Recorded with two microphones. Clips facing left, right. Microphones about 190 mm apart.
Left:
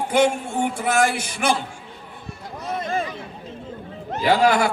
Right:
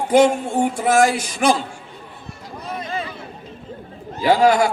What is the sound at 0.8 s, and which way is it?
Speech, 55° left (ahead or behind).